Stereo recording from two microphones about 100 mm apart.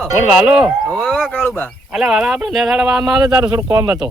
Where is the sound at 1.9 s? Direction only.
5° right (ahead or behind).